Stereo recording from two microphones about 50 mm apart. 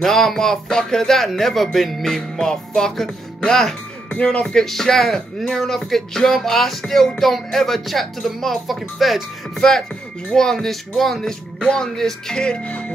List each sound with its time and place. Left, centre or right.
0.0 s speech: centre; by 4.6 s left
4.6 s speech: centre
9.6 s speech: centre